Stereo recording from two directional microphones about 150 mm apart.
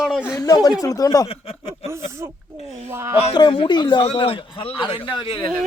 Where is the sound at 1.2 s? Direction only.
40° left (ahead or behind).